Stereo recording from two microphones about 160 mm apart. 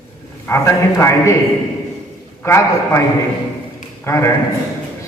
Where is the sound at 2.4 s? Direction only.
15° left (ahead or behind).